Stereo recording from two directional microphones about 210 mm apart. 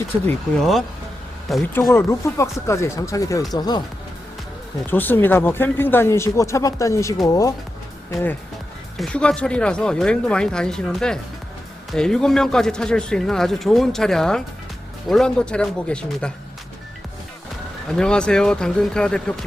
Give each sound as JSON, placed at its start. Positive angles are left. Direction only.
{"t": 0.3, "sound": "a man's voice", "side_deg": 5}
{"t": 4.9, "sound": "a man's voice", "side_deg": 10}
{"t": 17.9, "sound": "a man's voice", "side_deg": 5}